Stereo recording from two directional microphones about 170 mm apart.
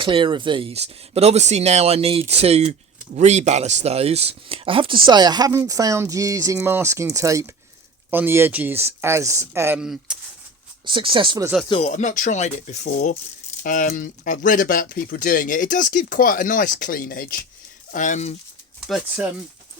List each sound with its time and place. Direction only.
0.0 s speech: 30° right (ahead or behind); by 9.8 s 15° right (ahead or behind)
9.8 s speech: 5° right (ahead or behind)
10.8 s speech: 30° right (ahead or behind)
11.7 s speech: 40° left (ahead or behind)
18.9 s speech: 5° right (ahead or behind)